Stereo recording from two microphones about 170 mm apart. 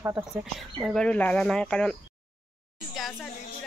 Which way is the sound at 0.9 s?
5° left (ahead or behind).